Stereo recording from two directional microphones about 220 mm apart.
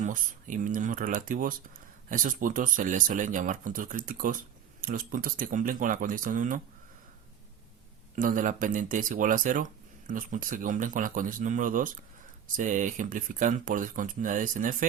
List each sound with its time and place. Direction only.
0.0 s speech: 35° right (ahead or behind)
8.1 s speech: 35° right (ahead or behind)